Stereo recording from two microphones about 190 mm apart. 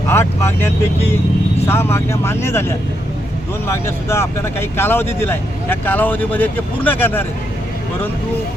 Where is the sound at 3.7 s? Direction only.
15° left (ahead or behind).